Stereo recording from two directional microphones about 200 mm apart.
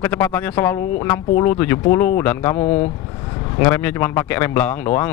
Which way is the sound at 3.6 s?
10° left (ahead or behind).